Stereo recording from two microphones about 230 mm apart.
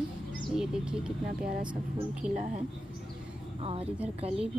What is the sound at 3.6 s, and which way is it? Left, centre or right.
Speech, right.